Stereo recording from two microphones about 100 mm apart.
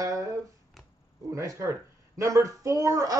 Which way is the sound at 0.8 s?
Centre (ahead or behind).